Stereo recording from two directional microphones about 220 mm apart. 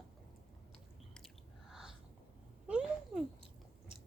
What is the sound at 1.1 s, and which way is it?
Chewing, centre (ahead or behind).